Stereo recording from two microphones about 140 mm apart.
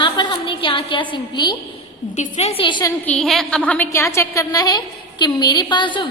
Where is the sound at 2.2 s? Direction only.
55° left (ahead or behind); by 2.9 s 35° left (ahead or behind).